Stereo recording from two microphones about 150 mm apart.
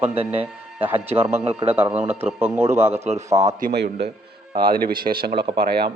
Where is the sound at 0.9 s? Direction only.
40° right (ahead or behind).